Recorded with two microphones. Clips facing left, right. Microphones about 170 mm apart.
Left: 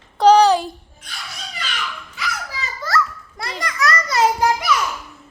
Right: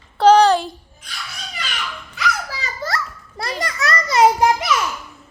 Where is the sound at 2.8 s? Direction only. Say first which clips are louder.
Left 2 dB; 25° right (ahead or behind).